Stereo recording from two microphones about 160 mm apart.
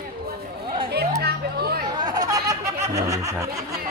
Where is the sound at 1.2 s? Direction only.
80° right.